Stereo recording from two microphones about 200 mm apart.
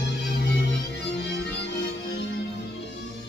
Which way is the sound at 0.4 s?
60° left (ahead or behind).